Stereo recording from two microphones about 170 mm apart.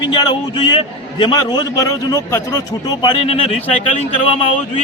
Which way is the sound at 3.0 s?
30° left (ahead or behind).